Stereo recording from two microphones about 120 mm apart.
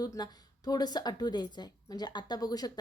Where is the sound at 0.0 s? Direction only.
35° left (ahead or behind).